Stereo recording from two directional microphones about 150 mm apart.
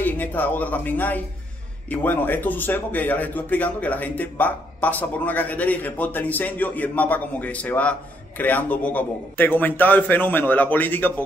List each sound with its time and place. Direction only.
0.0 s speech: 10° left (ahead or behind)